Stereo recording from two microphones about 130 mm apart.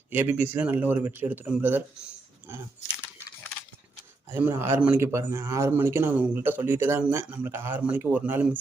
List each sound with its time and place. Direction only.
0.1 s speech: 15° right (ahead or behind)
4.3 s speech: 15° right (ahead or behind)